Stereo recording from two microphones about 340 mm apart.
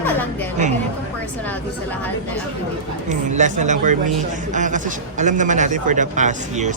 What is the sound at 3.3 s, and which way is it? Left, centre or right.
A man's voice, right.